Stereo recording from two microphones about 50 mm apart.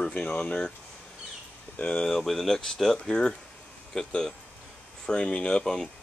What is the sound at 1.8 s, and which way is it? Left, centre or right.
Speech, left.